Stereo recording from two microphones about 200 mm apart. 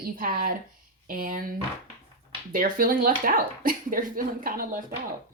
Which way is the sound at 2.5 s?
45° right (ahead or behind).